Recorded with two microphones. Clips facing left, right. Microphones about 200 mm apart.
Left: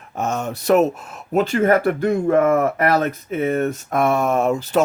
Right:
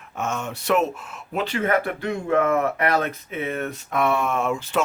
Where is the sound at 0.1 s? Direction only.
40° left (ahead or behind).